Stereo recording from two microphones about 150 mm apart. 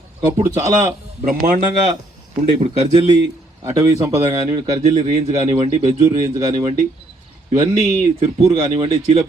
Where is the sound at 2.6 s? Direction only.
35° right (ahead or behind).